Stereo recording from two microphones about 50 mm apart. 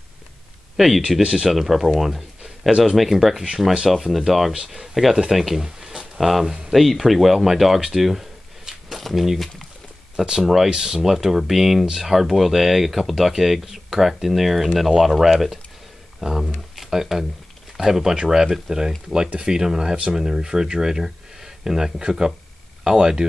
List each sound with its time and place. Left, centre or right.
0.7 s speech: centre
6.4 s speech: centre
6.7 s speech: centre